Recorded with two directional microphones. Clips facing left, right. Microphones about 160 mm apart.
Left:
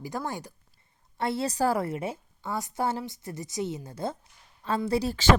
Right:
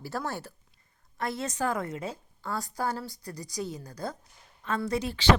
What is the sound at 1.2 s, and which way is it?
A woman's voice, 30° left (ahead or behind).